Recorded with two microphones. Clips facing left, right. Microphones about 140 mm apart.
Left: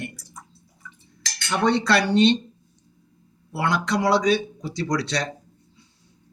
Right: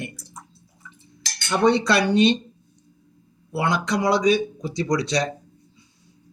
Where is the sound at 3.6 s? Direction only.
15° right (ahead or behind).